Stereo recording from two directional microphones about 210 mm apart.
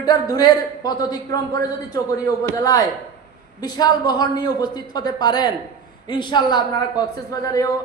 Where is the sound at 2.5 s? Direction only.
15° left (ahead or behind).